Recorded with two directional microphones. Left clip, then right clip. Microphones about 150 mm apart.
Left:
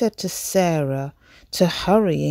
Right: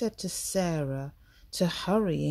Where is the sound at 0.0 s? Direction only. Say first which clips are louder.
Left 10 dB; 50° left (ahead or behind).